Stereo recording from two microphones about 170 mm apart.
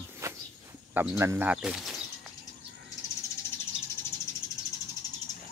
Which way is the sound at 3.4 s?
15° left (ahead or behind).